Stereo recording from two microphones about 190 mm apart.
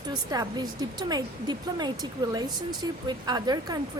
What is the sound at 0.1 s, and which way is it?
Speech, 20° right (ahead or behind).